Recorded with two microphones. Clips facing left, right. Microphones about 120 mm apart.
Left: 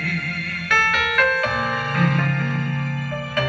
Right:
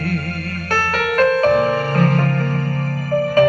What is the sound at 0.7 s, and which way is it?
Music, 40° right (ahead or behind).